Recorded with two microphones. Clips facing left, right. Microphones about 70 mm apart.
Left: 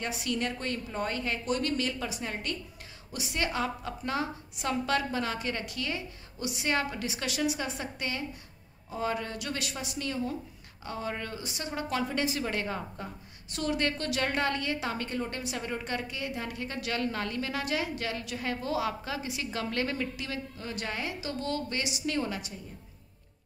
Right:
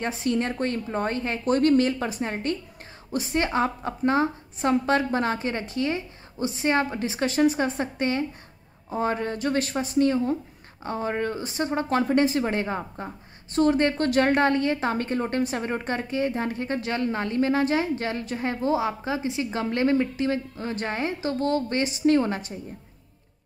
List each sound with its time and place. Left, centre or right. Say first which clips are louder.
0.0 s speech: right 7 dB; right